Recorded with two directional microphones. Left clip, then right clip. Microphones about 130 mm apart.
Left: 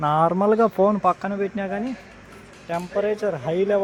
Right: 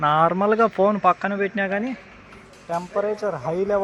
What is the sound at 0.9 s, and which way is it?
Speech, centre (ahead or behind).